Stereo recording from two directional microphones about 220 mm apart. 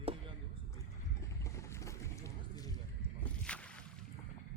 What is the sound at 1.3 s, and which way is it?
Boat, 15° left (ahead or behind).